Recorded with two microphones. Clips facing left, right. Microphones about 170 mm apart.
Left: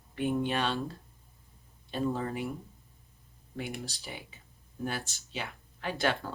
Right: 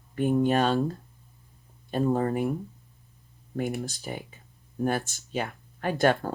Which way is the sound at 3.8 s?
50° right (ahead or behind).